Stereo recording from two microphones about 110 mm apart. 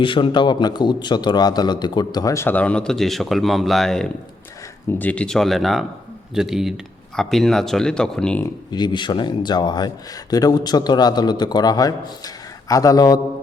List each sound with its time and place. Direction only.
0.0 s speech: 50° left (ahead or behind); by 2.5 s 30° left (ahead or behind)
2.5 s speech: 15° left (ahead or behind)
4.9 s speech: 15° left (ahead or behind)
8.7 s speech: 40° left (ahead or behind)